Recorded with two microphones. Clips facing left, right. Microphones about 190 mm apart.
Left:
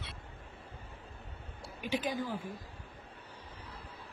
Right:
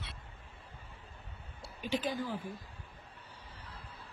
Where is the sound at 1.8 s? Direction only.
10° left (ahead or behind).